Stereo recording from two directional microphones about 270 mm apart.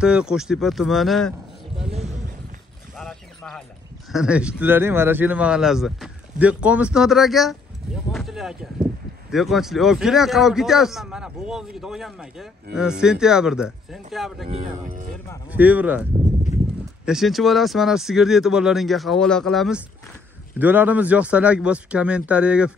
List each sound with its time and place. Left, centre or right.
0.0 s speech: centre
1.8 s a sound: right
3.0 s boat: centre
4.1 s speech: centre
8.1 s a sound: centre
9.3 s speech: centre
14.5 s speech: right
15.5 s speech: centre